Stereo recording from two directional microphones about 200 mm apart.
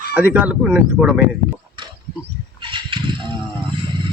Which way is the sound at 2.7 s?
25° right (ahead or behind).